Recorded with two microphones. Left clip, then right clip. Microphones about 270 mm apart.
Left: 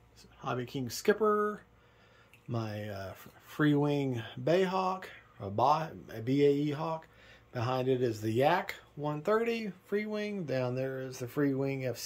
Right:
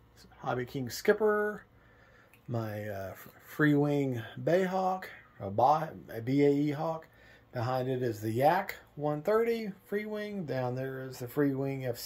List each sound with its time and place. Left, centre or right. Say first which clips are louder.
0.4 s speech: right 2 dB; centre